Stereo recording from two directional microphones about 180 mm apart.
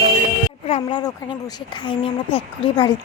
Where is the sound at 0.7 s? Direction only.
25° left (ahead or behind).